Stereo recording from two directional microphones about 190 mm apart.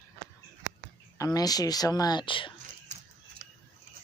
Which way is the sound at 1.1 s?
20° left (ahead or behind).